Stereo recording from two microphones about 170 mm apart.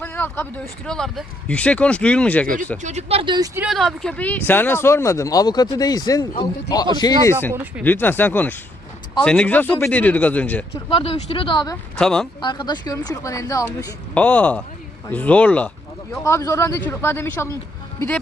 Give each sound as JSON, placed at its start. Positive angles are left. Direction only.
{"t": 0.0, "sound": "speech", "side_deg": 10}
{"t": 2.8, "sound": "speech", "side_deg": -40}
{"t": 3.5, "sound": "speech", "side_deg": -5}
{"t": 7.9, "sound": "speech", "side_deg": 10}
{"t": 10.8, "sound": "speech", "side_deg": 30}
{"t": 11.9, "sound": "speech", "side_deg": 5}
{"t": 12.4, "sound": "speech", "side_deg": 25}
{"t": 14.1, "sound": "speech", "side_deg": 5}
{"t": 16.2, "sound": "speech", "side_deg": 15}